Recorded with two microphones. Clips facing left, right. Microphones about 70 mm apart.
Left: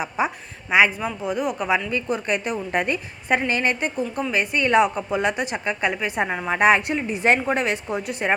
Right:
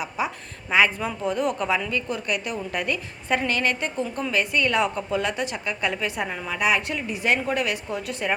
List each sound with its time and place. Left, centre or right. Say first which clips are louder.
0.2 s a woman's voice: left 4 dB; left
0.7 s speech: left 2 dB; centre
1.9 s a woman's voice: left 3 dB; left
6.5 s a woman's voice: left 6 dB; left
6.8 s a woman's voice: left 5 dB; left